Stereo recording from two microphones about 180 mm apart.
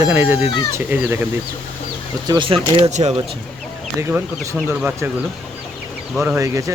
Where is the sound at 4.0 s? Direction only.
15° right (ahead or behind).